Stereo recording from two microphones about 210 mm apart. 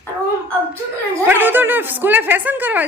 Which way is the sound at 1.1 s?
10° right (ahead or behind).